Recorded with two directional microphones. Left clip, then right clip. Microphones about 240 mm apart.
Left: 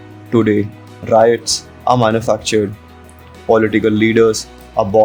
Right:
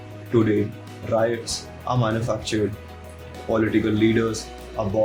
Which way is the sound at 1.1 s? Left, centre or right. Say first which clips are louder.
Left 12 dB; left.